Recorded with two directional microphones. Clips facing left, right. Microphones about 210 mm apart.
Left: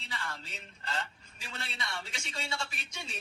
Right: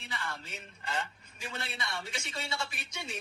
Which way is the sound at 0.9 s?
15° right (ahead or behind).